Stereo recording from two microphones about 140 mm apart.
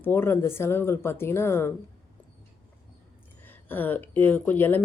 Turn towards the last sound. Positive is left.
turn(degrees=15)  # may be behind; listen again after turning